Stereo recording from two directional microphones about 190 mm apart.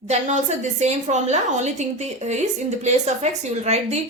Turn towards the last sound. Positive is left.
turn(degrees=-35)  # may be behind; listen again after turning